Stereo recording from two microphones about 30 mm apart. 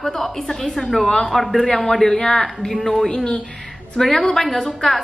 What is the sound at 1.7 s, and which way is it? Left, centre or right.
Speech, centre.